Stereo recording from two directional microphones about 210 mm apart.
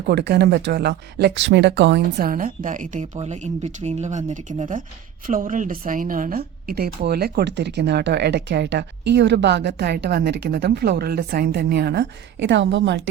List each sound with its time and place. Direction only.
0.1 s a woman's voice: 50° right (ahead or behind)
2.1 s a woman's voice: 40° right (ahead or behind); by 13.0 s 60° right (ahead or behind)